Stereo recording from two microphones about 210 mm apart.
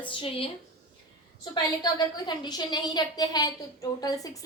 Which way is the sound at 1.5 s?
20° left (ahead or behind).